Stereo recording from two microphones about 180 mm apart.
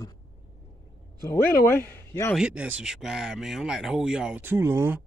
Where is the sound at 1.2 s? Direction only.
15° left (ahead or behind).